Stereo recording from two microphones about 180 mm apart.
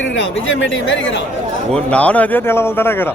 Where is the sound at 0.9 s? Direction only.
90° left.